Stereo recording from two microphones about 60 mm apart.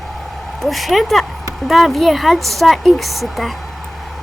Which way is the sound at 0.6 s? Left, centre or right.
Centre.